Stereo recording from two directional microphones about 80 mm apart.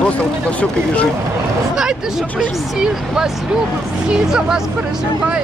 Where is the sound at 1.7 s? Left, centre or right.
Centre.